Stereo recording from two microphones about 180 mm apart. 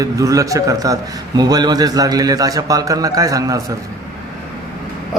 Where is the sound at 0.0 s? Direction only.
20° right (ahead or behind).